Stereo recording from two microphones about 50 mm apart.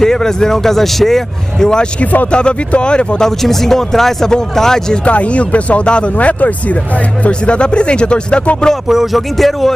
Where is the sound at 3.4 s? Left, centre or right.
Centre.